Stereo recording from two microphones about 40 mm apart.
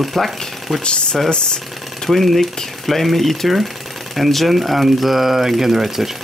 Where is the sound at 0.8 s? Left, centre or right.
Left.